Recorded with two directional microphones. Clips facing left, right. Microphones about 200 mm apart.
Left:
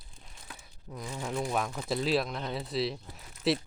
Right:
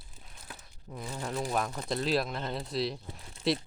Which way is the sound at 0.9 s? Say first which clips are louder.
Left 1 dB; centre (ahead or behind).